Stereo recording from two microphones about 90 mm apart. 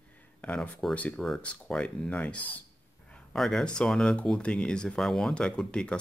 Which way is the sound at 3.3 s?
5° left (ahead or behind).